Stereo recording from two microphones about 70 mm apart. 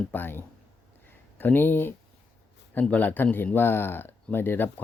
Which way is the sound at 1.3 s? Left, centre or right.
Left.